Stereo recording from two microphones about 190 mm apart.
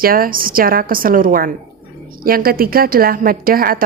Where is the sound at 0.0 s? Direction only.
50° right (ahead or behind).